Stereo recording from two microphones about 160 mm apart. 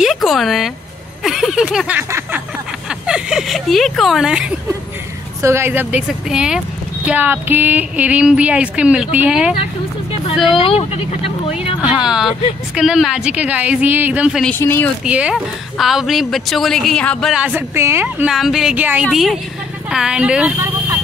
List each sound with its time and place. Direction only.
0.0 s a sound: centre (ahead or behind)
1.2 s speech: centre (ahead or behind)
5.4 s a woman's voice: 15° right (ahead or behind)
10.6 s speech: 35° left (ahead or behind)
11.8 s a woman's voice: 5° right (ahead or behind)
14.4 s speech: 10° left (ahead or behind)
15.0 s a woman's voice: 10° right (ahead or behind)
17.4 s a woman's voice: 10° right (ahead or behind)